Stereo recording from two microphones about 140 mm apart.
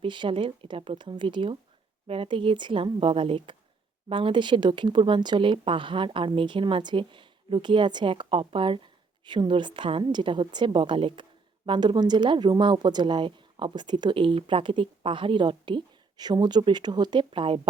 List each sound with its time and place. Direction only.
0.0 s speech: 35° right (ahead or behind)